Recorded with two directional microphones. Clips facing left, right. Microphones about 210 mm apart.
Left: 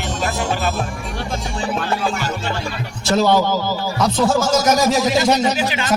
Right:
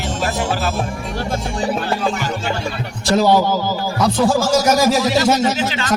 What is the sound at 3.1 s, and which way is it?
Speech, 10° right (ahead or behind).